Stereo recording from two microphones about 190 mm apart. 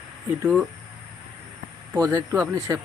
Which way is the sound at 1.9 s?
20° right (ahead or behind).